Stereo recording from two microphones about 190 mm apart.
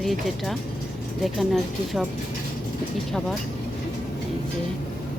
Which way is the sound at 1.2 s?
Centre (ahead or behind).